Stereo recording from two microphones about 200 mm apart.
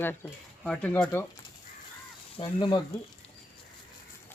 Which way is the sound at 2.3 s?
25° left (ahead or behind).